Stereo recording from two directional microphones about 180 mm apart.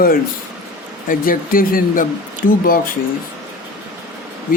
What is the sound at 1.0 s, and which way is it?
A man's voice, 50° left (ahead or behind).